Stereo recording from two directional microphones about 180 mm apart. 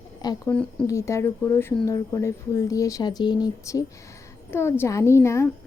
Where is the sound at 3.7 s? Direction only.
15° left (ahead or behind).